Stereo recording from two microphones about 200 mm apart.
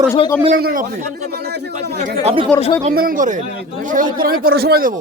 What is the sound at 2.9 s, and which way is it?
A man's voice, 45° right (ahead or behind).